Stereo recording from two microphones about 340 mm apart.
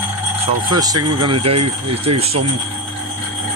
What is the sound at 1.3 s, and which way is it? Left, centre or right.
Speech, right.